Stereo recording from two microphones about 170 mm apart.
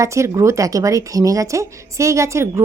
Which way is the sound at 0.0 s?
15° right (ahead or behind).